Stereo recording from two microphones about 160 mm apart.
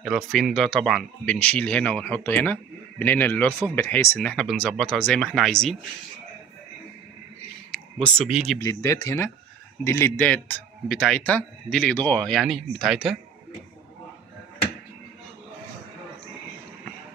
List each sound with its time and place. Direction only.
0.0 s speech: centre (ahead or behind)
7.7 s speech: 5° left (ahead or behind)
8.5 s speech: 20° left (ahead or behind); by 13.1 s centre (ahead or behind)